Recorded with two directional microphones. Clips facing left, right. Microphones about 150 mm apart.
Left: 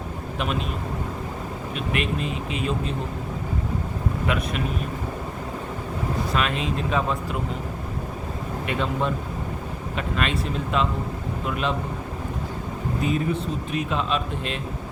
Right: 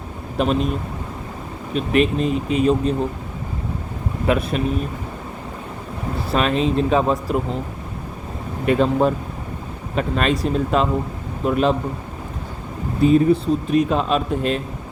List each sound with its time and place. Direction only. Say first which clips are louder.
0.3 s a man's voice: right 9 dB; 40° right (ahead or behind)
1.7 s a man's voice: right 9 dB; 35° right (ahead or behind)
4.3 s a man's voice: right 8 dB; 35° right (ahead or behind)
6.3 s a man's voice: right 10 dB; 35° right (ahead or behind)
8.6 s a man's voice: right 9 dB; 40° right (ahead or behind)
13.0 s a man's voice: right 11 dB; 35° right (ahead or behind)